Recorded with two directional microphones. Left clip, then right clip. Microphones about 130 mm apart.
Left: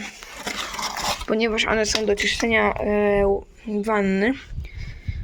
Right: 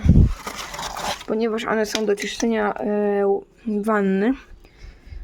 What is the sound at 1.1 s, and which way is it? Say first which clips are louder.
Cutlery: left 1 dB; 20° right (ahead or behind).